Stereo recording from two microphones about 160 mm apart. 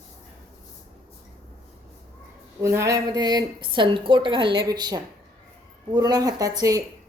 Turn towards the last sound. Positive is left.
turn(degrees=-20)  # may be behind; listen again after turning